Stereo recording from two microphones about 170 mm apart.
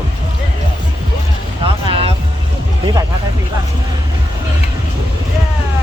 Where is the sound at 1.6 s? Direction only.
35° right (ahead or behind).